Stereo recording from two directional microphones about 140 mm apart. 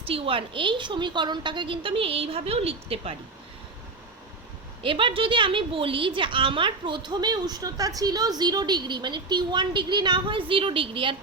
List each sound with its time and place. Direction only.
0.1 s a woman's voice: 40° right (ahead or behind)
4.8 s a woman's voice: 35° right (ahead or behind)